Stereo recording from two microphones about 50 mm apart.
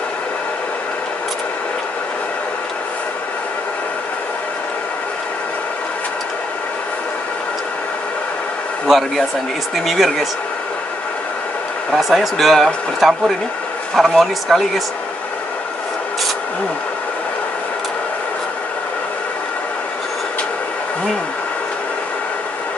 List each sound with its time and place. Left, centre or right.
8.8 s speech: centre
11.9 s speech: centre